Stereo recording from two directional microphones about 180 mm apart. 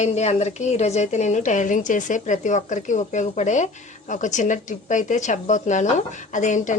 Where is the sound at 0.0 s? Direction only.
35° left (ahead or behind).